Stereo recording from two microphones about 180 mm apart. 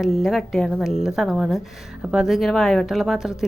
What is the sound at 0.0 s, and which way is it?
Speech, centre (ahead or behind).